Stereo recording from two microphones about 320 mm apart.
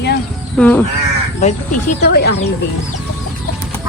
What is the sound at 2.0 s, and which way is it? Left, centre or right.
Speech, left.